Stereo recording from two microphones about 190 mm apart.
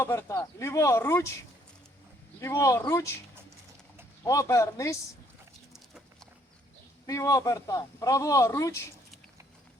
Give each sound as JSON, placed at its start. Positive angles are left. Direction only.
{"t": 0.0, "sound": "a man's voice", "side_deg": 15}
{"t": 2.4, "sound": "a man's voice", "side_deg": 15}
{"t": 4.2, "sound": "a man's voice", "side_deg": 15}
{"t": 7.1, "sound": "a man's voice", "side_deg": 15}